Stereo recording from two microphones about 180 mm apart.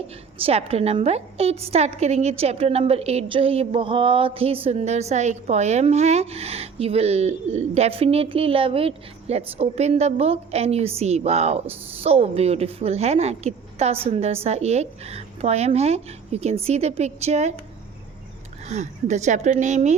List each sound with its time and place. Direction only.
0.4 s a woman's voice: 35° right (ahead or behind)
18.7 s a woman's voice: 40° right (ahead or behind)